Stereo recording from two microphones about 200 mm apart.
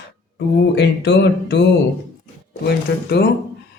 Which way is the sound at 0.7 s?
60° left (ahead or behind).